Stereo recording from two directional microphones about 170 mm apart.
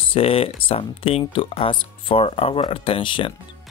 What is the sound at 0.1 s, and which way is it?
Speech, 35° left (ahead or behind).